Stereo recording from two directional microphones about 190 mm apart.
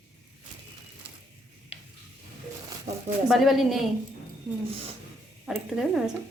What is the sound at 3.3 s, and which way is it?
Speech, centre (ahead or behind).